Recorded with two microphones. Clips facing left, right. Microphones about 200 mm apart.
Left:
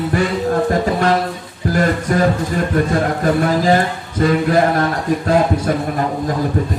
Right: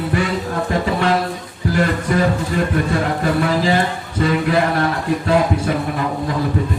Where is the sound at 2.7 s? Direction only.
45° left (ahead or behind).